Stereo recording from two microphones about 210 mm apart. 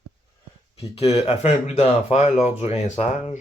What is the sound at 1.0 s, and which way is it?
Speech, 30° left (ahead or behind).